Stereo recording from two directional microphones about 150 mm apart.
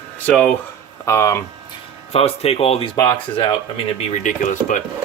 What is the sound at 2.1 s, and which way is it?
Speech, 40° left (ahead or behind).